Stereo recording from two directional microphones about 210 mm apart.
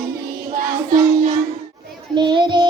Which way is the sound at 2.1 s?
20° right (ahead or behind).